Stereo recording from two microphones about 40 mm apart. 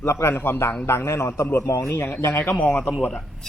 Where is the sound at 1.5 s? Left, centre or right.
Left.